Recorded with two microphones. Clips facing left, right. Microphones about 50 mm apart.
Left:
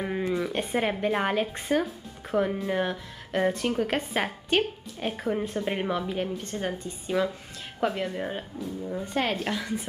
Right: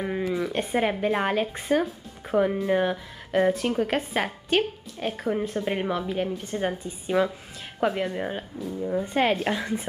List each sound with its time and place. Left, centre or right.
0.0 s speech: centre
8.8 s speech: centre